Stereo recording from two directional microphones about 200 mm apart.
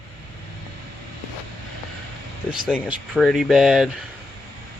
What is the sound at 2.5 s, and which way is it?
Speech, centre (ahead or behind).